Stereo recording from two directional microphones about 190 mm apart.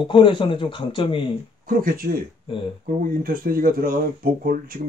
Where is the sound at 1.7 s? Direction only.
45° right (ahead or behind).